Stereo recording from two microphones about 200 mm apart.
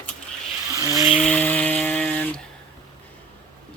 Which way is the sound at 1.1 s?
5° left (ahead or behind).